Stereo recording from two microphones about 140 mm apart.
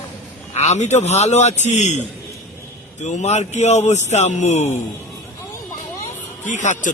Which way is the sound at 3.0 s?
55° left (ahead or behind).